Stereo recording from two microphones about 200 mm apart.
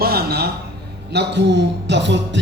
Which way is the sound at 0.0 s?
50° right (ahead or behind).